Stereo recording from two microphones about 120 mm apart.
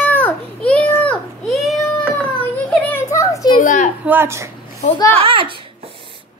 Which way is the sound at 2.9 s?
25° left (ahead or behind).